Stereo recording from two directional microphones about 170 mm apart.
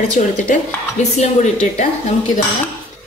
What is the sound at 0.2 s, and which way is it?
Speech, 45° left (ahead or behind).